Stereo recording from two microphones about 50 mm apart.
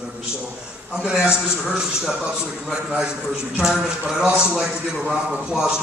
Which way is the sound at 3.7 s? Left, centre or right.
Centre.